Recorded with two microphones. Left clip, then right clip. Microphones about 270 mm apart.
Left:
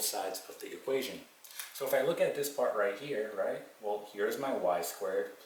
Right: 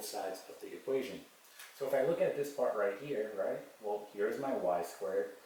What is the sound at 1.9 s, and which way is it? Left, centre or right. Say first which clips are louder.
Speech: left 2 dB; centre.